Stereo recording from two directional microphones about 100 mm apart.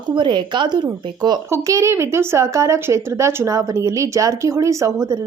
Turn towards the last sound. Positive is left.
turn(degrees=-30)  # may be behind; listen again after turning